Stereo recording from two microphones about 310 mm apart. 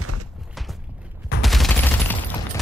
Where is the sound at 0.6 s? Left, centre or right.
Centre.